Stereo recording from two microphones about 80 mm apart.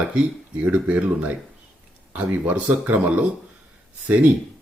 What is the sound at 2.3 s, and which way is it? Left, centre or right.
Speech, centre.